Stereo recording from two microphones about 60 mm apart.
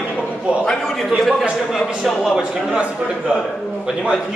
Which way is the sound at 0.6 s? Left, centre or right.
Centre.